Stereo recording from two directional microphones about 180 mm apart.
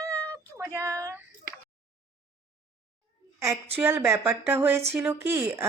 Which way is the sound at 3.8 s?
10° right (ahead or behind).